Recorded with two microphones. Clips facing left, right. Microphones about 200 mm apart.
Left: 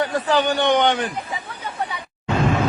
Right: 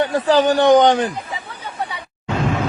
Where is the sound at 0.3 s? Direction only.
40° right (ahead or behind).